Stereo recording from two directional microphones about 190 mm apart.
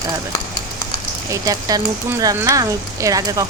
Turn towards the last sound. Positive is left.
turn(degrees=-20)  # may be behind; listen again after turning